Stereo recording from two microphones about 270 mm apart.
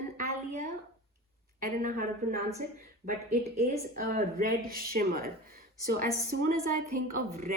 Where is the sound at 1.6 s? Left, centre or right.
Right.